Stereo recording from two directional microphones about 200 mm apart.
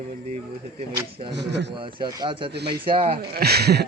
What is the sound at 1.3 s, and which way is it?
Speech, 60° right (ahead or behind).